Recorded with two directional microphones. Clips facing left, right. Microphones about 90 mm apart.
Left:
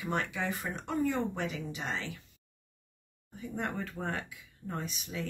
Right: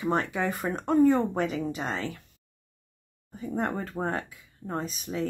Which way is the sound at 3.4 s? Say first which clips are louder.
Right 6 dB; 40° right (ahead or behind).